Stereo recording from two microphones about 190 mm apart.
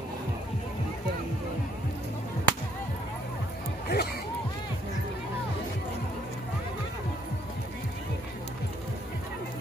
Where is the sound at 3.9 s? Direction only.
55° left (ahead or behind).